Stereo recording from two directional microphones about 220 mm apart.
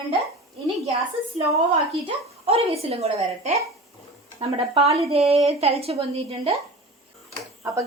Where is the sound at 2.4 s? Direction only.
25° right (ahead or behind).